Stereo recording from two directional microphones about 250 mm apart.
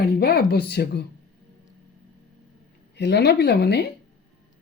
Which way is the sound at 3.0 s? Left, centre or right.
Left.